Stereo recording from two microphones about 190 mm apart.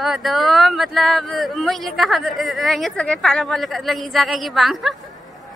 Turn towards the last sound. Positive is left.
turn(degrees=0)  # may be behind; listen again after turning